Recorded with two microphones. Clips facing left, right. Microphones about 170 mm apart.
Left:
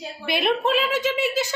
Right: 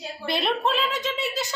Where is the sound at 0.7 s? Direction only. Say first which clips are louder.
Left 5 dB; 60° left (ahead or behind).